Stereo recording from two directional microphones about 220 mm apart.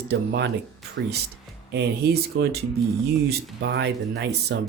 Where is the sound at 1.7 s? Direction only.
45° right (ahead or behind).